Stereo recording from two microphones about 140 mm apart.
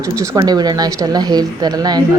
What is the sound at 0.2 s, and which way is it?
A woman's voice, 30° right (ahead or behind).